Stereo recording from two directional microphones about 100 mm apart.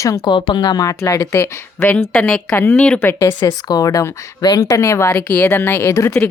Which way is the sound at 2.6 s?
20° left (ahead or behind).